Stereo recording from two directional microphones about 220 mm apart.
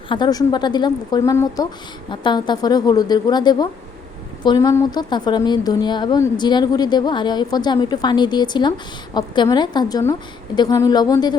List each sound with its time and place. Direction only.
0.1 s a woman's voice: 20° left (ahead or behind)